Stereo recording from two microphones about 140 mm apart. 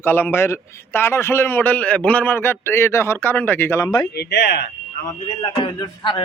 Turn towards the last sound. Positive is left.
turn(degrees=35)  # may be behind; listen again after turning